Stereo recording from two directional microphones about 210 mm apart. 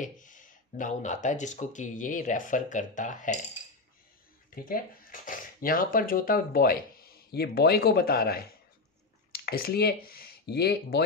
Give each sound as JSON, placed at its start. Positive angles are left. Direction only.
{"t": 0.0, "sound": "speech", "side_deg": 40}
{"t": 4.6, "sound": "speech", "side_deg": 40}